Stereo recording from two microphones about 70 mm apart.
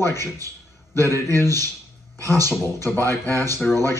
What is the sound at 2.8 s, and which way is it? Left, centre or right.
Speech, left.